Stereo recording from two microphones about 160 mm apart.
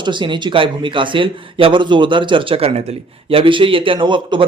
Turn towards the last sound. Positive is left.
turn(degrees=-30)  # may be behind; listen again after turning